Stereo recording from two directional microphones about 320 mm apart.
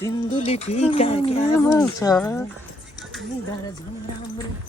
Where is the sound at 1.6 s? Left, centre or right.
Centre.